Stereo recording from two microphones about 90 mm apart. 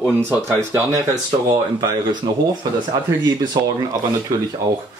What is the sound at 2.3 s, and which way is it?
Speech, 45° right (ahead or behind).